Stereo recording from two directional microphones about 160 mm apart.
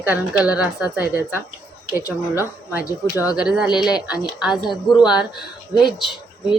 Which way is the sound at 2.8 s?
20° left (ahead or behind).